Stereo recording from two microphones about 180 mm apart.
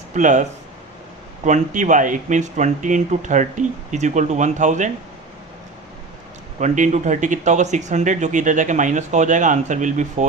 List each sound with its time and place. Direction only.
0.1 s speech: 45° right (ahead or behind)
1.5 s speech: 45° right (ahead or behind)
6.6 s speech: 45° right (ahead or behind)